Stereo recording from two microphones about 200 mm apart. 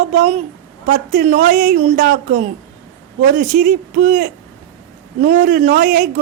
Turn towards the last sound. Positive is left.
turn(degrees=-45)  # may be behind; listen again after turning